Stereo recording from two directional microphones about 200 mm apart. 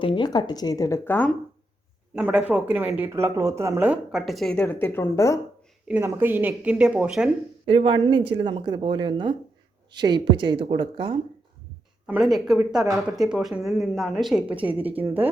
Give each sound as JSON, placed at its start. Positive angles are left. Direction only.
{"t": 0.0, "sound": "speech", "side_deg": 25}
{"t": 2.1, "sound": "speech", "side_deg": -5}
{"t": 5.9, "sound": "speech", "side_deg": -10}
{"t": 7.6, "sound": "a woman's voice", "side_deg": -25}
{"t": 12.0, "sound": "speech", "side_deg": -5}
{"t": 14.7, "sound": "a woman's voice", "side_deg": -30}
{"t": 14.9, "sound": "speech", "side_deg": -10}